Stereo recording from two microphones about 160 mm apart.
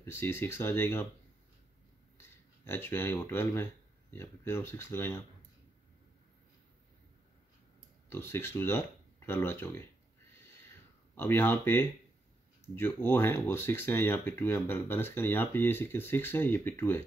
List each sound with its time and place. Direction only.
0.0 s speech: 15° left (ahead or behind)
2.2 s a sound: 15° left (ahead or behind)
3.2 s speech: 15° left (ahead or behind)
8.1 s speech: 15° left (ahead or behind)
11.1 s speech: 15° left (ahead or behind)